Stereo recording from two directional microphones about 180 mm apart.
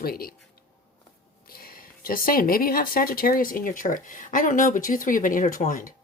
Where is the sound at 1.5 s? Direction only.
55° left (ahead or behind).